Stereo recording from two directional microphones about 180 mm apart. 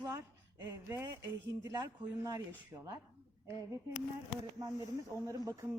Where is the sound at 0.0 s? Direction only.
20° right (ahead or behind).